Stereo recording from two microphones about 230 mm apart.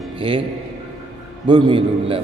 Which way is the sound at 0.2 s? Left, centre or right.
Right.